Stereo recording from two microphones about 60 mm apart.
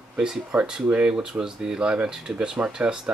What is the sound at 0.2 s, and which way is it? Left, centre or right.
Speech, centre.